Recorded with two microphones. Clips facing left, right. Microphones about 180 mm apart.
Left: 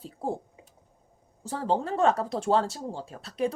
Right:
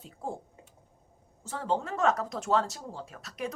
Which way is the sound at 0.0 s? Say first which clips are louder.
Left 6 dB; 35° left (ahead or behind).